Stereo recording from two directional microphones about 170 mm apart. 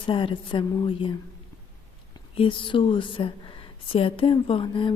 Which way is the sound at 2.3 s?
30° left (ahead or behind).